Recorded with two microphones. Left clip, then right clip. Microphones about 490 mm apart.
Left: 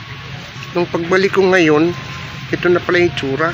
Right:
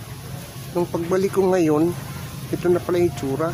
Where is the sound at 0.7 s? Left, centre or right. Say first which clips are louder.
Left 7 dB; right.